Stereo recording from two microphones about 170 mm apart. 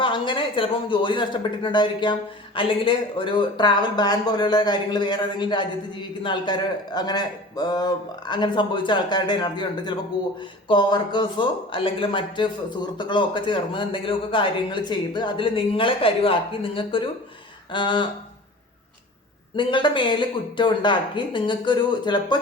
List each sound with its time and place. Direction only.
0.0 s speech: 30° left (ahead or behind)
19.5 s speech: 30° left (ahead or behind)